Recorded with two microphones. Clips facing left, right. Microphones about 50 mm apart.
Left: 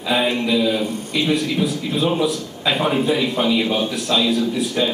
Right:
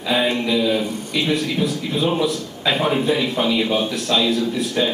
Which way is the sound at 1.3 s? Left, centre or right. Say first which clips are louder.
Left 1 dB; centre.